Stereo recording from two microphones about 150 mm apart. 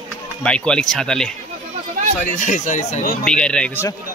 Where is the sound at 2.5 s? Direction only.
55° left (ahead or behind).